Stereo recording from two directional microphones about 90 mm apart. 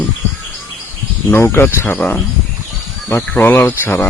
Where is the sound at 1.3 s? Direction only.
25° left (ahead or behind).